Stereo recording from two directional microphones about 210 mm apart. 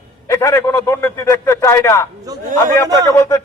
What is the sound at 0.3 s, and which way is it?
A man's voice, 15° left (ahead or behind).